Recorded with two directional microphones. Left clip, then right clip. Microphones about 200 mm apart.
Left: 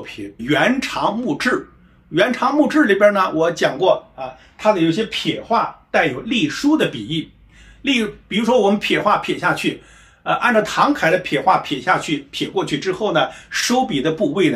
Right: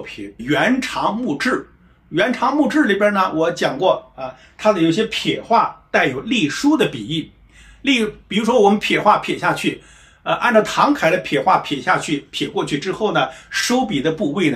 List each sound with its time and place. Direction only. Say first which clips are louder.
0.0 s speech: even; 10° left (ahead or behind)
4.6 s speech: even; 20° right (ahead or behind); by 14.5 s 5° right (ahead or behind)